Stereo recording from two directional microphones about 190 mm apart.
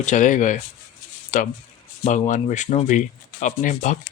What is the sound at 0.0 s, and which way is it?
Speech, 40° left (ahead or behind).